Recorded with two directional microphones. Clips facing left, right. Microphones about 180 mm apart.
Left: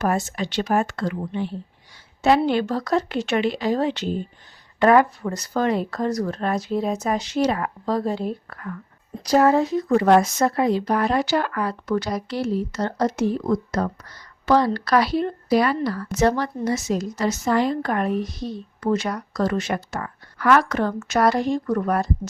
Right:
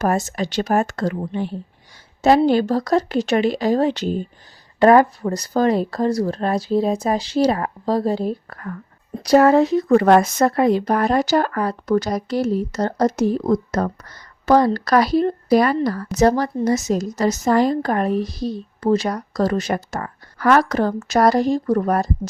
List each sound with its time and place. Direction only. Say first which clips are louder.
0.0 s a woman's voice: right 3 dB; 40° right (ahead or behind)
9.2 s a woman's voice: right 4 dB; 70° right (ahead or behind); by 22.3 s 40° right (ahead or behind)